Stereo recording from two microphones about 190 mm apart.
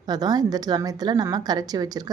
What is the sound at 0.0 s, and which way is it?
A woman's voice, 20° right (ahead or behind).